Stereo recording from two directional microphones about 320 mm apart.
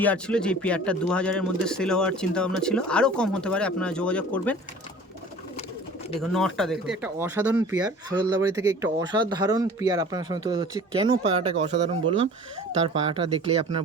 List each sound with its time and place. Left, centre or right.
0.0 s speech: centre
6.1 s speech: centre